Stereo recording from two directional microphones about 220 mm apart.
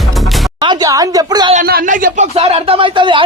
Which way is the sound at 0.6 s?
20° right (ahead or behind).